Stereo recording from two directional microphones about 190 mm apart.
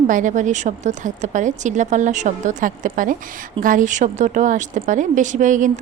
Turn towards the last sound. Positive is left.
turn(degrees=-40)  # may be behind; listen again after turning